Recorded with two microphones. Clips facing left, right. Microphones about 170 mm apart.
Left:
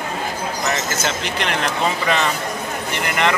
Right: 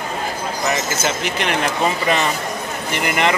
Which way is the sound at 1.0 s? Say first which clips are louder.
Right 2 dB; 10° right (ahead or behind).